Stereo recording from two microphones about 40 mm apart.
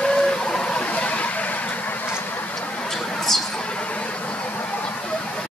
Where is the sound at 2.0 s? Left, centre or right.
Left.